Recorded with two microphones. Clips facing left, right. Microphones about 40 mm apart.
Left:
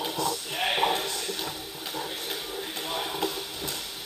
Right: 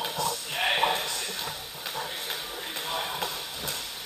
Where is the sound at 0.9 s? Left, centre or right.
Right.